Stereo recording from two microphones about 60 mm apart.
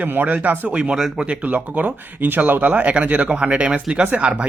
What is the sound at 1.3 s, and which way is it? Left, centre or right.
Speech, right.